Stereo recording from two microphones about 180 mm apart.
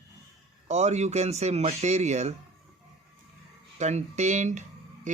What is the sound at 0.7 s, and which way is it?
Speech, 40° right (ahead or behind).